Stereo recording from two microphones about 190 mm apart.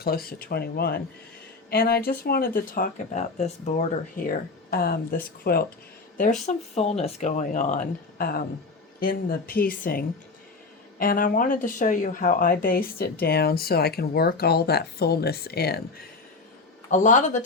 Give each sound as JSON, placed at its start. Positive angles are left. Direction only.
{"t": 0.0, "sound": "speech", "side_deg": 50}
{"t": 6.4, "sound": "speech", "side_deg": 35}
{"t": 16.9, "sound": "speech", "side_deg": 40}